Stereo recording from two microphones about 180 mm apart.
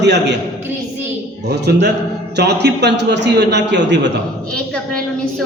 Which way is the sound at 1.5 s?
70° right (ahead or behind).